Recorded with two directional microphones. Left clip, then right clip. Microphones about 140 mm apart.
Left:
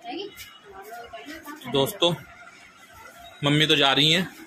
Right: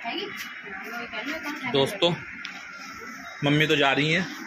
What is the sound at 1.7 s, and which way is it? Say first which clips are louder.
Speech: left 1 dB; 15° left (ahead or behind).